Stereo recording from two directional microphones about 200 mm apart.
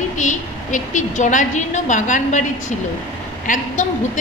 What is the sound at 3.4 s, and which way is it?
Speech, 40° left (ahead or behind).